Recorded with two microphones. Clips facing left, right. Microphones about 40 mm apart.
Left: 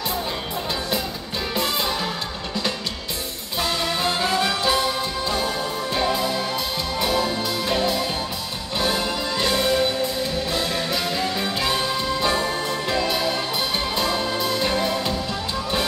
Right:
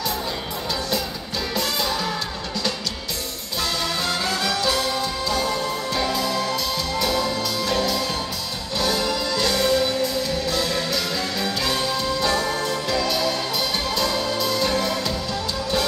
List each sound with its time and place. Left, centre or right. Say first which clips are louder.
1.5 s music: left 1 dB; left
3.6 s music: left 2 dB; left